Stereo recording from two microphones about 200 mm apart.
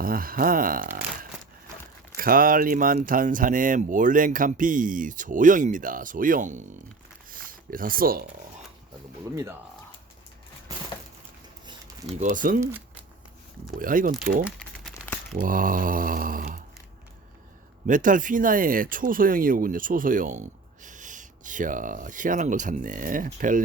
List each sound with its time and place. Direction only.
0.0 s speech: 45° right (ahead or behind)
2.1 s speech: 45° right (ahead or behind)
7.3 s a sound: 45° right (ahead or behind)
9.3 s speech: 15° right (ahead or behind)
11.6 s a sound: 25° right (ahead or behind)
12.2 s speech: 40° right (ahead or behind)
13.7 s mantra: 45° right (ahead or behind)
15.0 s crumpling: 5° left (ahead or behind)
15.4 s mantra: 45° right (ahead or behind)
17.8 s speech: 40° right (ahead or behind)